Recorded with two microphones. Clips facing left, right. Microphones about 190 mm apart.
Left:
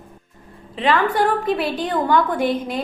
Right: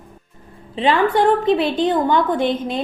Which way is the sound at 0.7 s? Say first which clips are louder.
Right 2 dB; 30° right (ahead or behind).